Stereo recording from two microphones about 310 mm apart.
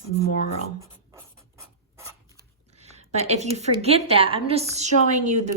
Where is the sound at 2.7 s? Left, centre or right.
Right.